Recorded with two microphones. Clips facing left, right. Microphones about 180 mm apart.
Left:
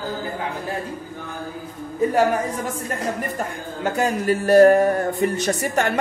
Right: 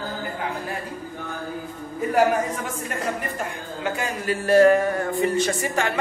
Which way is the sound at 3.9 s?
40° left (ahead or behind).